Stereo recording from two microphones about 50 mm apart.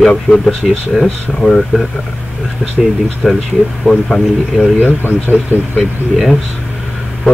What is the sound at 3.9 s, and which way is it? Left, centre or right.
Speech, centre.